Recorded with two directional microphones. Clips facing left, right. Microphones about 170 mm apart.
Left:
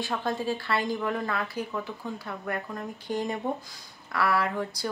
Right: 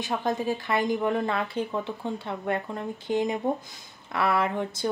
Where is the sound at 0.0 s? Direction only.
20° right (ahead or behind).